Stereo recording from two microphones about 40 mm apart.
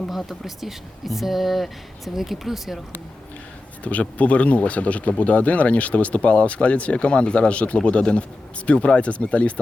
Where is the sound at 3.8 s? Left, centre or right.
Left.